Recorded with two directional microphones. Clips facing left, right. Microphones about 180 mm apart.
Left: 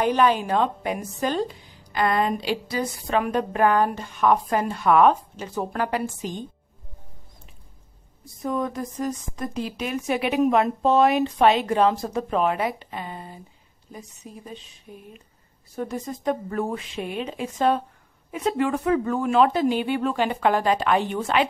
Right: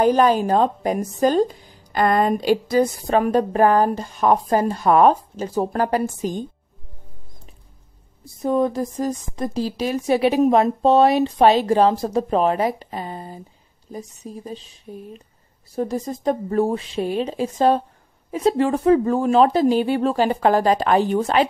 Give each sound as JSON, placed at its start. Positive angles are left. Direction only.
{"t": 0.0, "sound": "a woman's voice", "side_deg": -40}
{"t": 8.4, "sound": "a woman's voice", "side_deg": -30}